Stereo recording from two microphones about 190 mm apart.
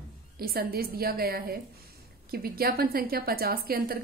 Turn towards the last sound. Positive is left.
turn(degrees=-50)  # may be behind; listen again after turning